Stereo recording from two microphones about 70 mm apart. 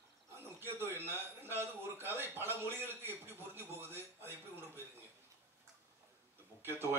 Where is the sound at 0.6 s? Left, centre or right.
Right.